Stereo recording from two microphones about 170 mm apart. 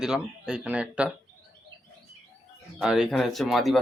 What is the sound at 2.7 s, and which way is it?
Speech, centre (ahead or behind).